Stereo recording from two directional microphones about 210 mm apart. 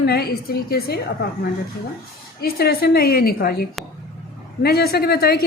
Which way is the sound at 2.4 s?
50° left (ahead or behind).